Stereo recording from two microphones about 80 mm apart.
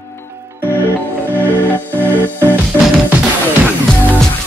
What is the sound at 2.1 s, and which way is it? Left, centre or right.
Music, right.